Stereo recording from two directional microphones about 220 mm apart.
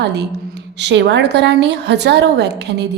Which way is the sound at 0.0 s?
50° right (ahead or behind).